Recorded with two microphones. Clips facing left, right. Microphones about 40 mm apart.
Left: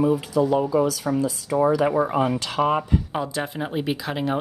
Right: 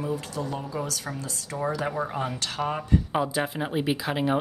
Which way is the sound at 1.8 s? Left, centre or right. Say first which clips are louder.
Left 8 dB; left.